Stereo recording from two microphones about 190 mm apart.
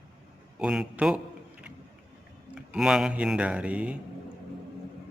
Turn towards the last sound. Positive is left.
turn(degrees=-5)  # may be behind; listen again after turning